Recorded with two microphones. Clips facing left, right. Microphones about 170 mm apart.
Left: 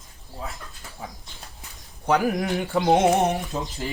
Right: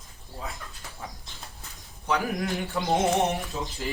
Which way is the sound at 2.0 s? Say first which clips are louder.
Left 5 dB; 65° left (ahead or behind).